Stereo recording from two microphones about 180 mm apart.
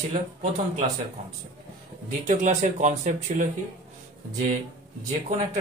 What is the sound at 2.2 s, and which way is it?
Speech, 45° right (ahead or behind).